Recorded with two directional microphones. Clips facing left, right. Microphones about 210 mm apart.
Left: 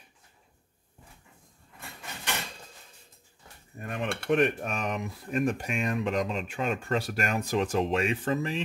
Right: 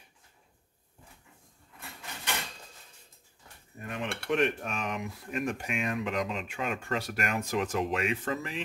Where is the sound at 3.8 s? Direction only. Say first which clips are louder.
Left 4 dB; 50° left (ahead or behind).